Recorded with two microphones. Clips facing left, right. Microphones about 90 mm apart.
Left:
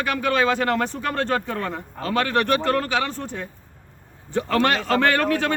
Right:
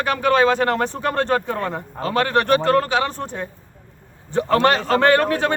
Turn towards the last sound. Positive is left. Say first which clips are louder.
# right 4 dB
turn(degrees=-25)  # may be behind; listen again after turning